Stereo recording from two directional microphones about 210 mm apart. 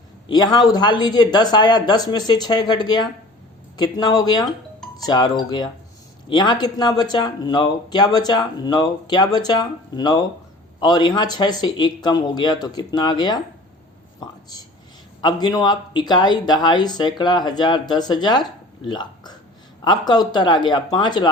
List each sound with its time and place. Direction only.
0.3 s speech: 20° left (ahead or behind)
15.2 s speech: 20° left (ahead or behind)